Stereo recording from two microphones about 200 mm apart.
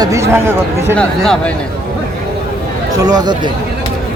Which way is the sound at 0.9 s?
Centre (ahead or behind).